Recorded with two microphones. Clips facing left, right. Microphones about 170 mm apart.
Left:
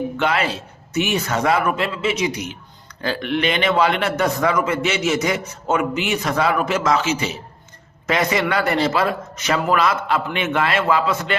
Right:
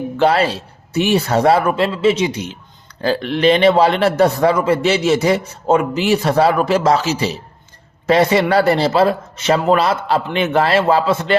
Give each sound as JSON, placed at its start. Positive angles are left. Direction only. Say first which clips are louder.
{"t": 0.2, "sound": "a man's voice", "louder": "right 9 dB", "side_deg": -35}